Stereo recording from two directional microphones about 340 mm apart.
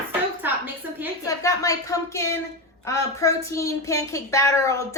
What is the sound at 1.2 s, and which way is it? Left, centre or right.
A woman's voice, centre.